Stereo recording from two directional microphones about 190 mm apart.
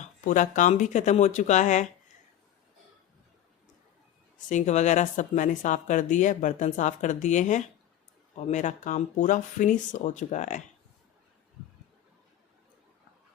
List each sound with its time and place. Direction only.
0.0 s speech: 40° left (ahead or behind)
4.4 s speech: 40° left (ahead or behind)